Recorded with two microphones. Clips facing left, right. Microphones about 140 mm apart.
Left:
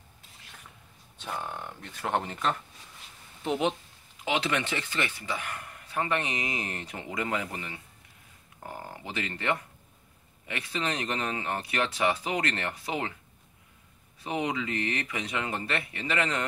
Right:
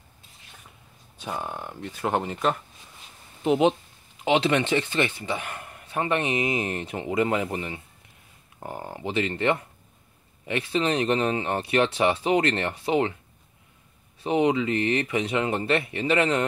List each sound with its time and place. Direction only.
1.1 s speech: 10° right (ahead or behind)
3.4 s a man's voice: 20° right (ahead or behind)
14.2 s a man's voice: 25° right (ahead or behind)